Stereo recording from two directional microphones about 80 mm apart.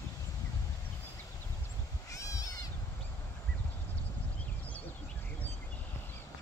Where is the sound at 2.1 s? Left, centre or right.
Left.